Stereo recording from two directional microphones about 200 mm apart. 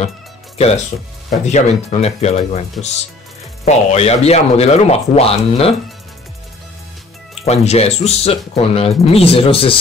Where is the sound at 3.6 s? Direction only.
30° left (ahead or behind).